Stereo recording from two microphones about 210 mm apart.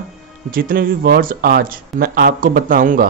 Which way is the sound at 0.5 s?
45° right (ahead or behind).